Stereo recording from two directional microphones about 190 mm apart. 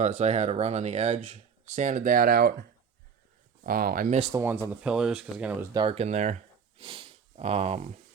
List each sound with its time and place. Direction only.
0.0 s speech: 40° right (ahead or behind)
4.4 s speech: 10° right (ahead or behind)
5.7 s speech: 30° right (ahead or behind)